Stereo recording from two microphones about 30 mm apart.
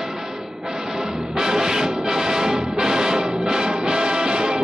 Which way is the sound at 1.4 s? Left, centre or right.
Right.